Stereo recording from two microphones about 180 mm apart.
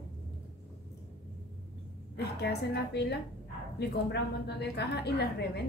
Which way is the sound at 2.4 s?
65° left (ahead or behind).